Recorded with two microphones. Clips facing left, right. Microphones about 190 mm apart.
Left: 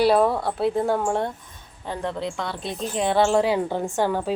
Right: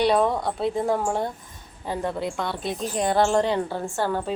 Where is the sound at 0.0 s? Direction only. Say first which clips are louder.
Left 2 dB; 5° left (ahead or behind).